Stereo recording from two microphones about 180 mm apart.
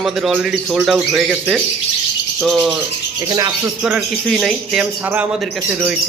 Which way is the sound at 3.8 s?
5° right (ahead or behind).